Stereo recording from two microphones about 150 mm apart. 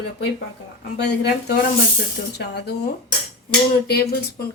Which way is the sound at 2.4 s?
90° left.